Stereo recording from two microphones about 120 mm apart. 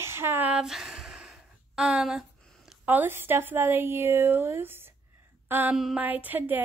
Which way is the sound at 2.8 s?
15° right (ahead or behind).